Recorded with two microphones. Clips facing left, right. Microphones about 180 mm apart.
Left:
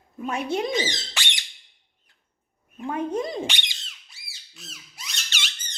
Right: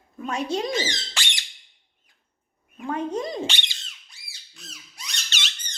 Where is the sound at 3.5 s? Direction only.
15° left (ahead or behind).